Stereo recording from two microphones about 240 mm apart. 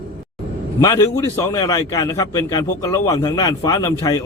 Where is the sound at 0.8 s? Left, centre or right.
Centre.